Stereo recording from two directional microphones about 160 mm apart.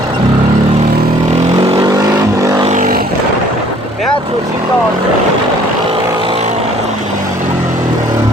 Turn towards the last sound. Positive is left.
turn(degrees=-35)  # may be behind; listen again after turning